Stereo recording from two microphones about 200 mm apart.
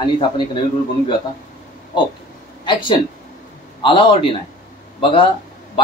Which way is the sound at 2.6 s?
25° left (ahead or behind).